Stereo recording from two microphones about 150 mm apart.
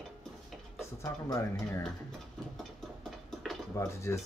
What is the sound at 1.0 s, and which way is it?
Speech, 20° left (ahead or behind).